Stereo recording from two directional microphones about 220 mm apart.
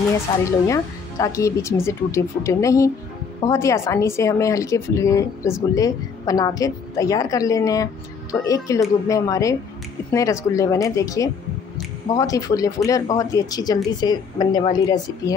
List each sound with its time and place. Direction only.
0.5 s speech: 15° left (ahead or behind)